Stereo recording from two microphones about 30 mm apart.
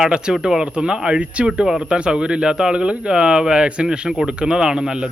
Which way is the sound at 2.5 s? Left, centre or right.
Right.